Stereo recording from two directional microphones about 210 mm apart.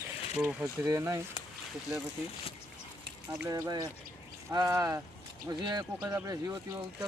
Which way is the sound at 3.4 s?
15° right (ahead or behind).